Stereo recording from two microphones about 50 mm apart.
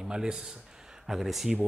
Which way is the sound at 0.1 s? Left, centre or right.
Centre.